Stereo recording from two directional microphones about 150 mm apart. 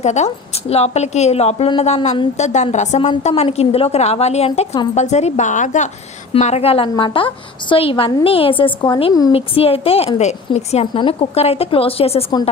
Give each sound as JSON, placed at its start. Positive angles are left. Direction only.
{"t": 0.0, "sound": "a woman's voice", "side_deg": 50}
{"t": 6.4, "sound": "a woman's voice", "side_deg": 45}